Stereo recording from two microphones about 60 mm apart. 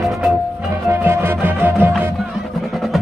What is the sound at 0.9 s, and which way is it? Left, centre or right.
Music, right.